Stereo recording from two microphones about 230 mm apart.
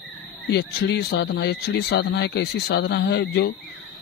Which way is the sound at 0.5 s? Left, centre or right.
Left.